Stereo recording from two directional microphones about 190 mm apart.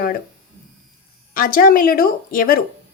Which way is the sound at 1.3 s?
50° left (ahead or behind).